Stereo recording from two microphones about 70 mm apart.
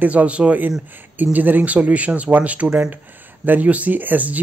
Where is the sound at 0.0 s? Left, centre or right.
Right.